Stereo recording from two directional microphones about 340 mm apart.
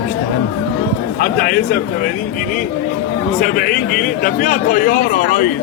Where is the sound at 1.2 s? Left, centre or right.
Left.